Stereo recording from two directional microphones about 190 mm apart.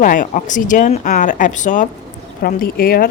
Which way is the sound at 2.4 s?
50° left (ahead or behind).